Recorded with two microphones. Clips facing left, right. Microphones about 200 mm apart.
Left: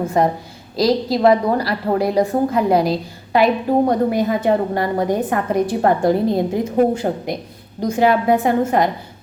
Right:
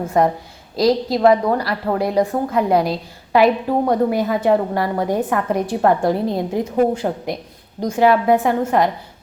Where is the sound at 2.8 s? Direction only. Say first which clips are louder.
Left 2 dB; 5° right (ahead or behind).